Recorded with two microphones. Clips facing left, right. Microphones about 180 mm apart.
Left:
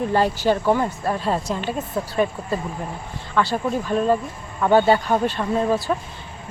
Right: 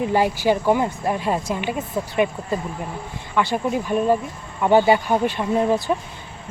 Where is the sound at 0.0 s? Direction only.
15° right (ahead or behind).